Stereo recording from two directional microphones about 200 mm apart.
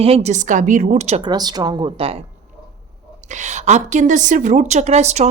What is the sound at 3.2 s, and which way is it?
A woman's voice, 35° right (ahead or behind).